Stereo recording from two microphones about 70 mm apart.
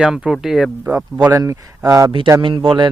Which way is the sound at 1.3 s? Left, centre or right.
Right.